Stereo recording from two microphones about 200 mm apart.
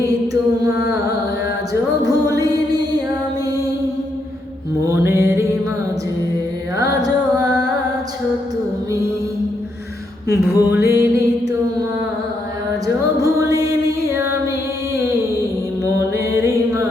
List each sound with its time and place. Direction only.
2.0 s music: 15° right (ahead or behind)
4.9 s music: 15° right (ahead or behind)
6.7 s music: 15° right (ahead or behind)
10.2 s music: 15° right (ahead or behind)
13.1 s music: 15° right (ahead or behind)
15.8 s music: 15° right (ahead or behind)